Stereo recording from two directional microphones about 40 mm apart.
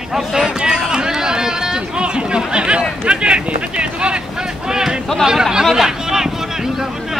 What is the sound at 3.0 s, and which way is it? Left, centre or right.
Speech, right.